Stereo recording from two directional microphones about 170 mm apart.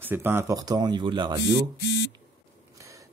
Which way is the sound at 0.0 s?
10° right (ahead or behind).